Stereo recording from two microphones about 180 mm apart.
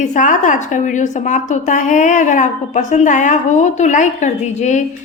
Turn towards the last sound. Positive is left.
turn(degrees=40)  # may be behind; listen again after turning